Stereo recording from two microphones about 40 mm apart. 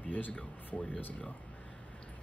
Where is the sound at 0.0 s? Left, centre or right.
Left.